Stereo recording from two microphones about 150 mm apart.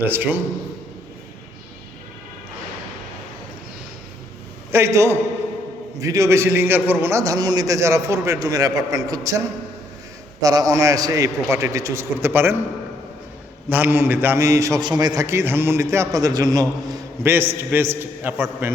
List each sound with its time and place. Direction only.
0.1 s a man's voice: 10° right (ahead or behind)
4.7 s a man's voice: 20° right (ahead or behind)
10.4 s a man's voice: 25° right (ahead or behind)
13.7 s a man's voice: 15° right (ahead or behind)
17.3 s a man's voice: 15° right (ahead or behind)